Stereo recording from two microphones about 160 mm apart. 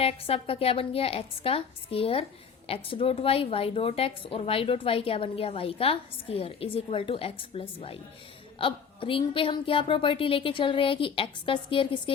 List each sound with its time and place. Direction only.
0.0 s a woman's voice: 35° left (ahead or behind)